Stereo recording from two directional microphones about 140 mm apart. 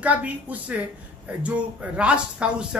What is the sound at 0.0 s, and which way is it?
Speech, 10° right (ahead or behind).